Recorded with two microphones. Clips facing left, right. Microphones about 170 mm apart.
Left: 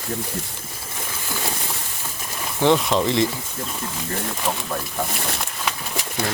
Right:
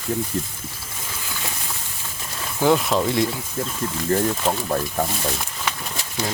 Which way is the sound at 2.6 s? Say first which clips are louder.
Even; 5° right (ahead or behind).